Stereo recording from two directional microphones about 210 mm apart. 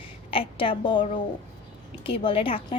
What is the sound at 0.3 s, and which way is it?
Speech, 25° left (ahead or behind).